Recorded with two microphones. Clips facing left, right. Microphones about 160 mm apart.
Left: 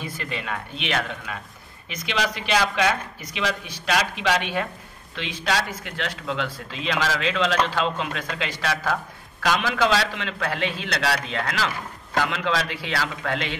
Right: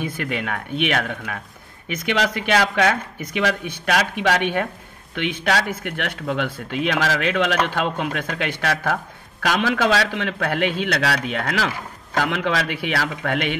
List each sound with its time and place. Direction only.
0.0 s speech: 60° right (ahead or behind)